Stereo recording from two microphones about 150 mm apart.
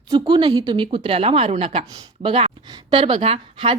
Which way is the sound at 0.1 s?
30° right (ahead or behind).